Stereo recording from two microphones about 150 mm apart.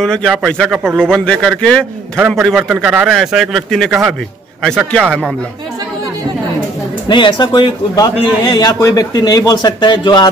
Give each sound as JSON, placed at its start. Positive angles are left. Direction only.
{"t": 0.0, "sound": "a man's voice", "side_deg": 5}
{"t": 7.1, "sound": "a man's voice", "side_deg": 30}